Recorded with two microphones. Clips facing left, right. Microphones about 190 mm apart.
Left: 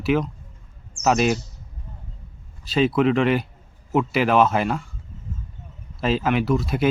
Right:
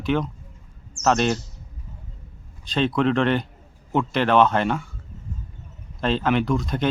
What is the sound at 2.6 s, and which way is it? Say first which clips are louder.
Speech: left 2 dB; 5° left (ahead or behind).